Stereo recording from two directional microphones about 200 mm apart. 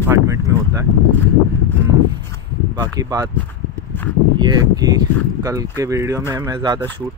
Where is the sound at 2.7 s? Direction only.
20° right (ahead or behind).